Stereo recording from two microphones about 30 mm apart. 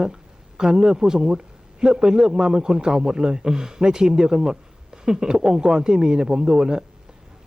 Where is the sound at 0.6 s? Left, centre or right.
Right.